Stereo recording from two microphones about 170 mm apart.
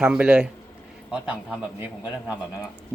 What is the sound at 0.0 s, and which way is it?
Speech, 5° right (ahead or behind).